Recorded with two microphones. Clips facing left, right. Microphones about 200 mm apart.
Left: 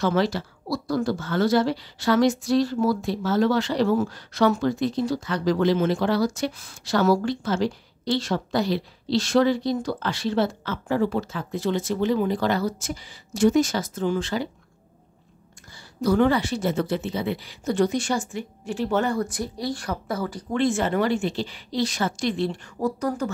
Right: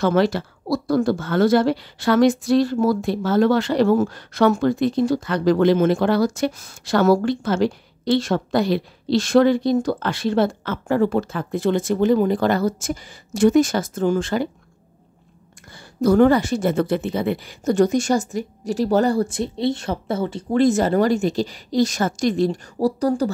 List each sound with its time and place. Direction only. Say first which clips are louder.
0.0 s speech: right 4 dB; 55° right (ahead or behind)
16.0 s speech: right 5 dB; 45° right (ahead or behind); by 20.4 s 25° right (ahead or behind)
20.5 s speech: right 6 dB; 40° right (ahead or behind)